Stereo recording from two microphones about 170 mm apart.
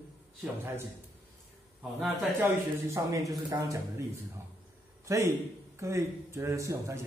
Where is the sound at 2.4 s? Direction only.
15° right (ahead or behind).